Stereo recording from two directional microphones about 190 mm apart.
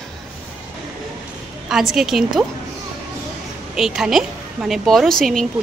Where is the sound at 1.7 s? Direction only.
Centre (ahead or behind).